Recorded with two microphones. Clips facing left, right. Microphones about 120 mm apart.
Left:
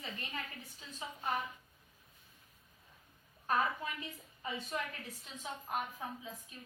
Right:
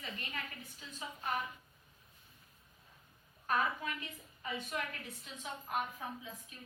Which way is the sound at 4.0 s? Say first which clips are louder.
Left 1 dB; 30° left (ahead or behind).